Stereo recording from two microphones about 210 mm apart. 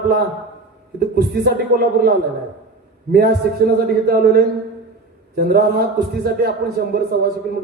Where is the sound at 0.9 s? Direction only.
50° right (ahead or behind).